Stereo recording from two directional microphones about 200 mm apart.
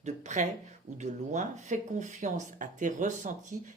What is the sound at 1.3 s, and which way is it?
Speech, 40° right (ahead or behind).